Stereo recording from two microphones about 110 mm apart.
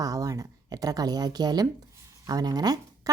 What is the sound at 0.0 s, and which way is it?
A woman's voice, 30° right (ahead or behind).